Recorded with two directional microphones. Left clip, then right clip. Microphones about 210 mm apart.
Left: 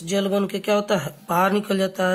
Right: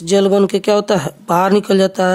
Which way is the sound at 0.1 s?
50° right (ahead or behind).